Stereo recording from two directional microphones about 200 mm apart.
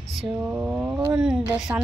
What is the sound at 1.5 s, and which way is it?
Speech, 5° right (ahead or behind).